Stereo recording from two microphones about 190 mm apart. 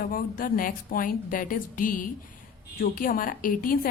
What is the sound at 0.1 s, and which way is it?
A woman's voice, 50° left (ahead or behind).